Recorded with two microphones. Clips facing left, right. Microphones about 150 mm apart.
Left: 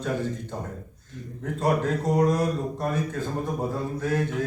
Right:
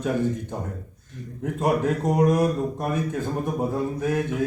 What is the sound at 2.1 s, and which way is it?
A man's voice, 15° right (ahead or behind).